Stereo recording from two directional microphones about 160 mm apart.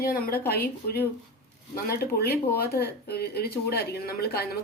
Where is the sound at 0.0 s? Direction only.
65° left (ahead or behind).